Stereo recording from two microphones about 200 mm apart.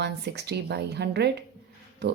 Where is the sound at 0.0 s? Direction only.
55° right (ahead or behind).